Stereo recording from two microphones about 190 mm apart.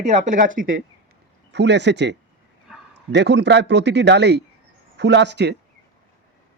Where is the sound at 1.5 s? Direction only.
65° right (ahead or behind).